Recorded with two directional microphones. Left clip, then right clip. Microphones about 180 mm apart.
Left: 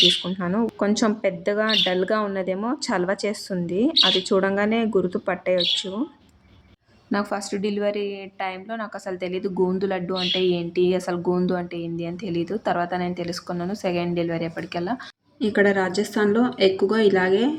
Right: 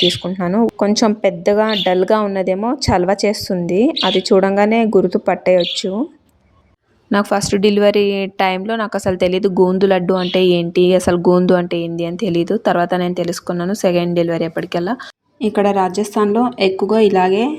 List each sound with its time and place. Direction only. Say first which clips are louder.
0.1 s speech: right 4 dB; 35° right (ahead or behind)
7.1 s a woman's voice: right 10 dB; 45° right (ahead or behind)